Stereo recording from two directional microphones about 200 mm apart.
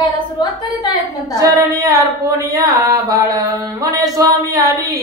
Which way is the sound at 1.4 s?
15° right (ahead or behind).